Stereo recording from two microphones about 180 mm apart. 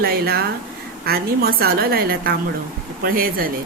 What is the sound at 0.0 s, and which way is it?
A woman's voice, 60° right (ahead or behind).